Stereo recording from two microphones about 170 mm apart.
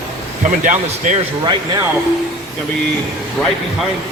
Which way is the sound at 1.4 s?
25° right (ahead or behind).